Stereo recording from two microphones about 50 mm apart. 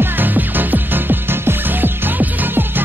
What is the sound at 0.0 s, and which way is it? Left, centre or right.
Music, right.